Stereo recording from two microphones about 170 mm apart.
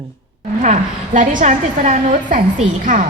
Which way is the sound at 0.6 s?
45° right (ahead or behind).